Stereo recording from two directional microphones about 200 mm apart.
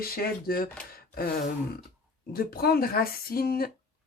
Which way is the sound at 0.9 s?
50° left (ahead or behind).